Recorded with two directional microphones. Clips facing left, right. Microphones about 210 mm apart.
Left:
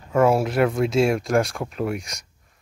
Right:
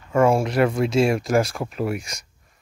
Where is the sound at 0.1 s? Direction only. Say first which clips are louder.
Even; 5° left (ahead or behind).